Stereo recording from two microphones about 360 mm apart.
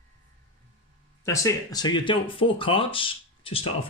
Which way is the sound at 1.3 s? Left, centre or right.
Centre.